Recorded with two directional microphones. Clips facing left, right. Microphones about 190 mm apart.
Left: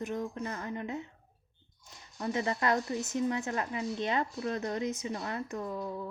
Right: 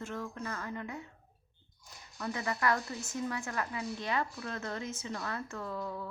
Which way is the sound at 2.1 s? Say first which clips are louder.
Left 4 dB; 25° left (ahead or behind).